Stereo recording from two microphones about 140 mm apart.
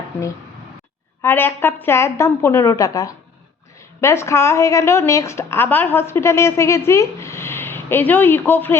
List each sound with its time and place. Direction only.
1.2 s a woman's voice: 15° left (ahead or behind)